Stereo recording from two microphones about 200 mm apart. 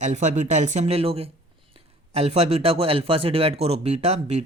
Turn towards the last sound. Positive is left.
turn(degrees=-35)  # may be behind; listen again after turning